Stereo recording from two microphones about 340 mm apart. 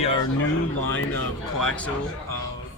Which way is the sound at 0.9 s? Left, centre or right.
Centre.